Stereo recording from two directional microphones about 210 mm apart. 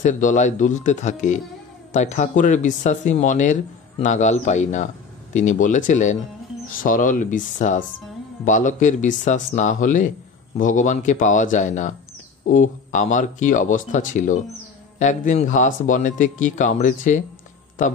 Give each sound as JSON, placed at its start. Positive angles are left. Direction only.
{"t": 0.0, "sound": "speech", "side_deg": 35}